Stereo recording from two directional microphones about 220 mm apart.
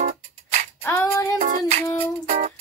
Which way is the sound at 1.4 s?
35° right (ahead or behind).